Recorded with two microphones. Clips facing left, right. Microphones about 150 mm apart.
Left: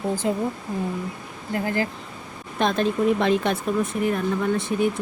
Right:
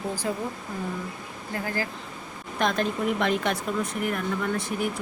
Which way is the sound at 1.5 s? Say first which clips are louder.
Left 6 dB; 25° left (ahead or behind).